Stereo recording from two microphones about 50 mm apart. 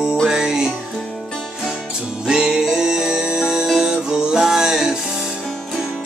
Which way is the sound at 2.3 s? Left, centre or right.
Centre.